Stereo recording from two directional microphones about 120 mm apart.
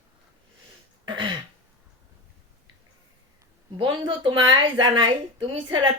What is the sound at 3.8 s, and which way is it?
Speech, 40° right (ahead or behind).